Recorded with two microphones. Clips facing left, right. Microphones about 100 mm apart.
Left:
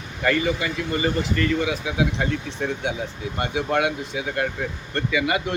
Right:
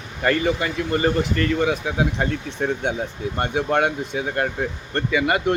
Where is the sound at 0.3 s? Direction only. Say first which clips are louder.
Right 2 dB; 50° right (ahead or behind).